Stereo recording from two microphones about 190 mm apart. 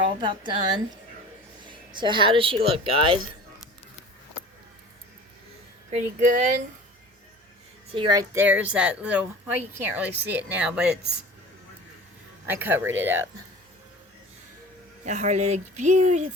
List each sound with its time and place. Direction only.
0.2 s a woman's voice: 25° right (ahead or behind)
2.0 s a woman's voice: 25° right (ahead or behind)
5.9 s speech: 40° right (ahead or behind)
7.9 s speech: 20° right (ahead or behind)
12.5 s speech: 10° right (ahead or behind)
15.0 s speech: 40° right (ahead or behind)